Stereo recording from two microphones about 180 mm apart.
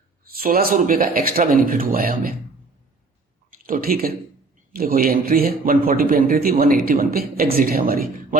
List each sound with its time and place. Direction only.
0.3 s a man's voice: 55° right (ahead or behind)
3.5 s a man's voice: 50° right (ahead or behind)